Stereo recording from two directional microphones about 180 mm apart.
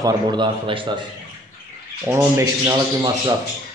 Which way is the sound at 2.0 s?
15° right (ahead or behind).